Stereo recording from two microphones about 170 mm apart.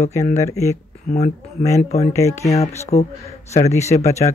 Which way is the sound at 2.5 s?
40° left (ahead or behind).